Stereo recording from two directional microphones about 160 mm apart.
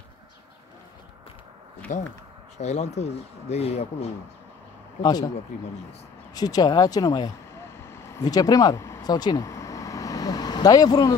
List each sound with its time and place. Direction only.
1.9 s speech: 50° left (ahead or behind)
5.5 s speech: 50° left (ahead or behind)
6.3 s speech: 25° left (ahead or behind)